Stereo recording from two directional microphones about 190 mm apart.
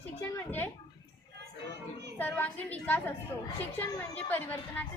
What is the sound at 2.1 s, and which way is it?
A woman's voice, 10° left (ahead or behind).